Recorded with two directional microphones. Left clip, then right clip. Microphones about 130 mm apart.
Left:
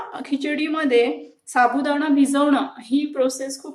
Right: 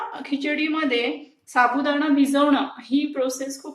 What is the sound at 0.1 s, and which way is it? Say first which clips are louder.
A woman's voice: left 1 dB; 50° left (ahead or behind).